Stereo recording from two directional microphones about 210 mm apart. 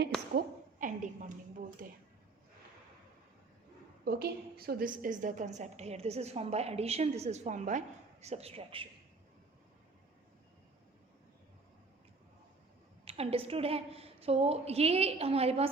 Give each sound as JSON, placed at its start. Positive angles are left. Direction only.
{"t": 0.3, "sound": "a woman's voice", "side_deg": -40}
{"t": 4.0, "sound": "a woman's voice", "side_deg": -45}
{"t": 13.1, "sound": "a woman's voice", "side_deg": -30}